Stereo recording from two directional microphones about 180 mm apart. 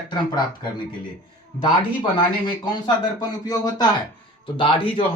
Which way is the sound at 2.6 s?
25° left (ahead or behind).